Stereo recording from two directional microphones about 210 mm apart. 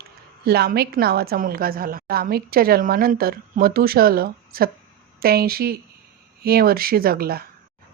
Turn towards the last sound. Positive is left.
turn(degrees=-45)  # may be behind; listen again after turning